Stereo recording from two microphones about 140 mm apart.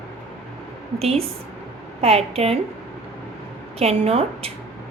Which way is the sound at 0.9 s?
45° right (ahead or behind).